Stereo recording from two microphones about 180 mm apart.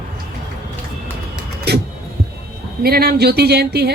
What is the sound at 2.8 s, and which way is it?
Speech, 60° right (ahead or behind).